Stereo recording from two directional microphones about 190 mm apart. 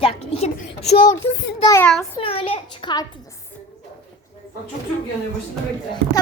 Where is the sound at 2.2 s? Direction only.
30° left (ahead or behind).